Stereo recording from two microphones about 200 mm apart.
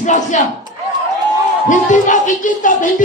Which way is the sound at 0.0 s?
40° left (ahead or behind).